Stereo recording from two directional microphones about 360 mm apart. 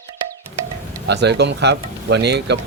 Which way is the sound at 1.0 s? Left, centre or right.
Right.